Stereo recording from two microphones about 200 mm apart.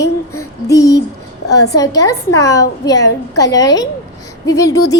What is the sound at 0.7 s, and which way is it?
A child's voice, 15° left (ahead or behind).